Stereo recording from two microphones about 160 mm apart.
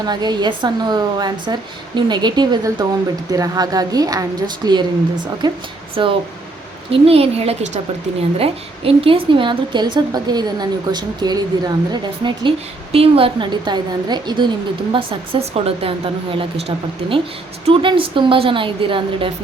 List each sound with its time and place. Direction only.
0.0 s a woman's voice: 25° right (ahead or behind)